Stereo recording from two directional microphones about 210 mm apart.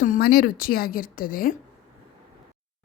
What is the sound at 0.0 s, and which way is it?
A woman's voice, 45° left (ahead or behind).